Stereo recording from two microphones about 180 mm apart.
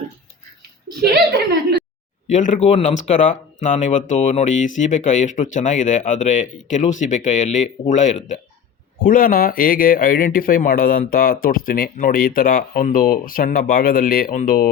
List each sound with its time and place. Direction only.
2.3 s speech: 40° left (ahead or behind)